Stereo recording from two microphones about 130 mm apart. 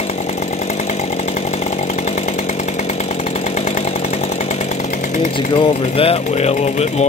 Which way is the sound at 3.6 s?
60° left (ahead or behind).